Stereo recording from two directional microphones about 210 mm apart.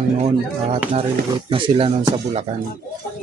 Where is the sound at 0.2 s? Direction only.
30° right (ahead or behind).